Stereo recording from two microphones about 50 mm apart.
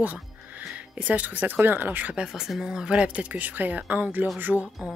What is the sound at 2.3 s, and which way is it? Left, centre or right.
Speech, centre.